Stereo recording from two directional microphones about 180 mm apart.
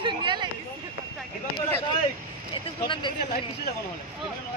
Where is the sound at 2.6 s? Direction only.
25° left (ahead or behind).